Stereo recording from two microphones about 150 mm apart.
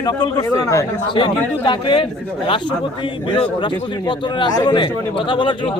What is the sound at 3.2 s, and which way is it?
Speech, 35° left (ahead or behind).